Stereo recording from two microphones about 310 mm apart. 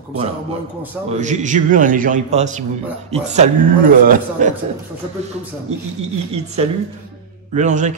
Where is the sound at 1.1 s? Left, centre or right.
Right.